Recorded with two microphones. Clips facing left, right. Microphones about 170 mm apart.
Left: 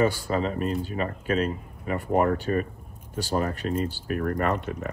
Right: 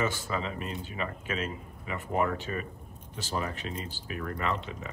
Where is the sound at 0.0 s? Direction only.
40° left (ahead or behind).